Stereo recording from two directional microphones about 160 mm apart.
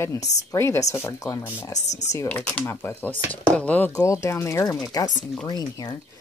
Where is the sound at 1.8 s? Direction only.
45° left (ahead or behind).